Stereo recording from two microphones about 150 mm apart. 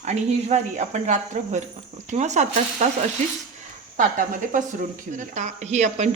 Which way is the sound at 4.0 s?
60° right (ahead or behind).